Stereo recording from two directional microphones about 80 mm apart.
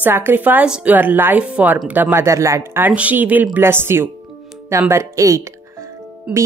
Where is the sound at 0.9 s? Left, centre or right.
Right.